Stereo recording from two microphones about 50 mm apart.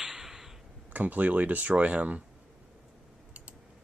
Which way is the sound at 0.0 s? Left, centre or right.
Centre.